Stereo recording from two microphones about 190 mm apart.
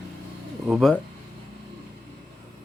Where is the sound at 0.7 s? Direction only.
Centre (ahead or behind).